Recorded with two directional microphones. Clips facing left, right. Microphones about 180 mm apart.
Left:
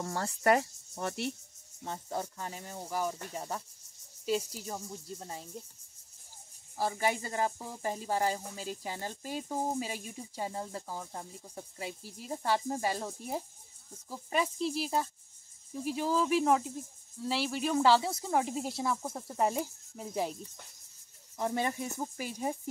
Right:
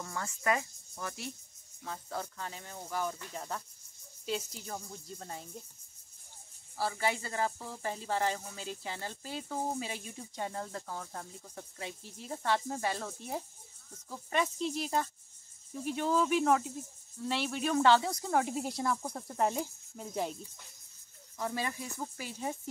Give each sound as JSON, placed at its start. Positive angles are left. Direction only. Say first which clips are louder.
{"t": 0.0, "sound": "speech", "louder": "left 5 dB", "side_deg": 35}
{"t": 1.8, "sound": "speech", "louder": "left 3 dB", "side_deg": 25}
{"t": 6.8, "sound": "speech", "louder": "left 2 dB", "side_deg": 15}
{"t": 21.4, "sound": "speech", "louder": "left 4 dB", "side_deg": 25}